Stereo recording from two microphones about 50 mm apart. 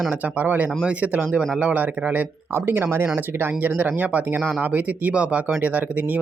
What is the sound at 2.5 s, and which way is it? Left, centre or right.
Speech, right.